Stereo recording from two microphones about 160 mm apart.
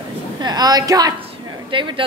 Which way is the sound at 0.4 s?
25° right (ahead or behind).